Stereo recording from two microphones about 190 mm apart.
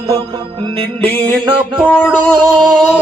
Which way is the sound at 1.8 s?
5° left (ahead or behind).